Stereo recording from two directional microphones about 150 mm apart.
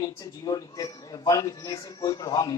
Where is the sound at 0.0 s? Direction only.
25° left (ahead or behind).